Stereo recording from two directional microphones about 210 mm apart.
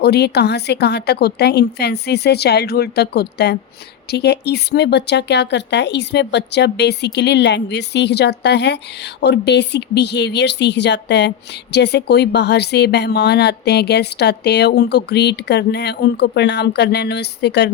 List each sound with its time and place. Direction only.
0.0 s speech: 50° left (ahead or behind)